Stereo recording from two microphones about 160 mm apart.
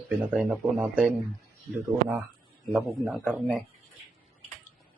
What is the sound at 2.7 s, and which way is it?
Speech, centre (ahead or behind).